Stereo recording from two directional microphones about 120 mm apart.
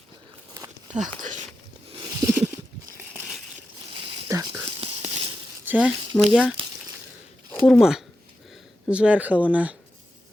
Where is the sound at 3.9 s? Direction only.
45° right (ahead or behind).